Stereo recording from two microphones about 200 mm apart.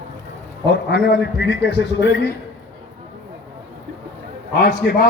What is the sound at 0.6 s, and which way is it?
A man's voice, 60° left (ahead or behind).